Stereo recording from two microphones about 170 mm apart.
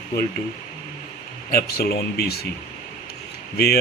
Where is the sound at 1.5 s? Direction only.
65° left (ahead or behind).